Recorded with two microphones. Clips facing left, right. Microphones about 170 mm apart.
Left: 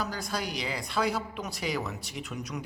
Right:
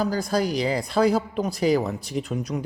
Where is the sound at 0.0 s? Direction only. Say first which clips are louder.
Right 10 dB; 35° right (ahead or behind).